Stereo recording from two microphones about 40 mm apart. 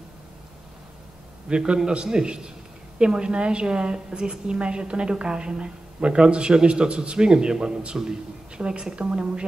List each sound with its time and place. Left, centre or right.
1.5 s a woman's voice: right